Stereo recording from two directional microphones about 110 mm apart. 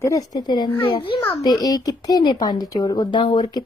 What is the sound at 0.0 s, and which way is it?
Speech, 30° left (ahead or behind).